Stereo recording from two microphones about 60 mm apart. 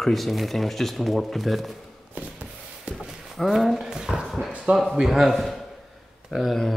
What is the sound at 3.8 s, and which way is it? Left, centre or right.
Dog, centre.